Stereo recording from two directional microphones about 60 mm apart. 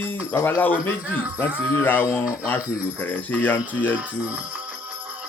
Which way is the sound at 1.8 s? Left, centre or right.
Left.